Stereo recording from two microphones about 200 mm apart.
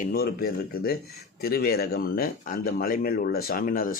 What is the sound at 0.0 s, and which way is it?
Speech, 50° left (ahead or behind).